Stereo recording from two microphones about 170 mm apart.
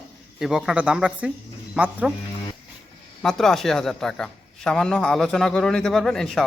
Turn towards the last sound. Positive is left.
turn(degrees=0)  # may be behind; listen again after turning